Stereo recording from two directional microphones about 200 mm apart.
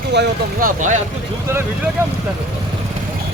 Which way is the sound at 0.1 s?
60° right (ahead or behind).